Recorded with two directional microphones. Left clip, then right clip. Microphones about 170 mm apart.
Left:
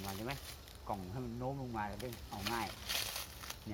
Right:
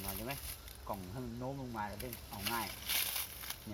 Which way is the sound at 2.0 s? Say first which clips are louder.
Left 1 dB; 15° left (ahead or behind).